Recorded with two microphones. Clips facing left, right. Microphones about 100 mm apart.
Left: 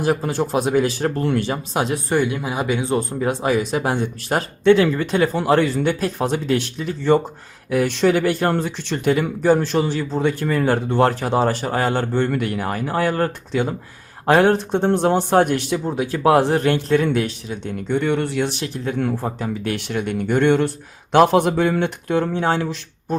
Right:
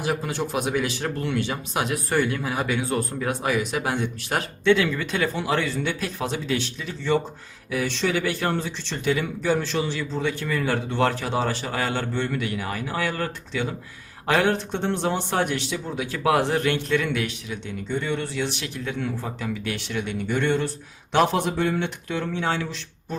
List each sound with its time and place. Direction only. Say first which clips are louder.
0.0 s speech: left 6 dB; 35° left (ahead or behind)
2.0 s speech: left 3 dB; 15° left (ahead or behind); by 17.6 s 35° left (ahead or behind)
17.7 s speech: left 7 dB; 60° left (ahead or behind)
18.5 s speech: left 6 dB; 40° left (ahead or behind)